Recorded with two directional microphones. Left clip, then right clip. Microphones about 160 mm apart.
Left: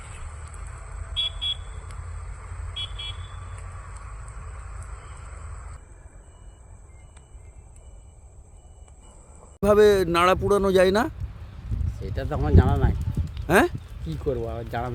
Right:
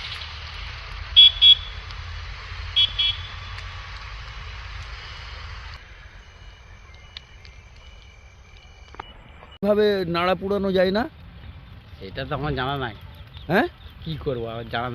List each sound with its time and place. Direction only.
1.0 s vehicle: 90° left
9.6 s speech: 15° left (ahead or behind)